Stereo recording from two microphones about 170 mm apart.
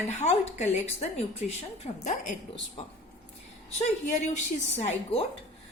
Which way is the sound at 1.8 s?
45° left (ahead or behind).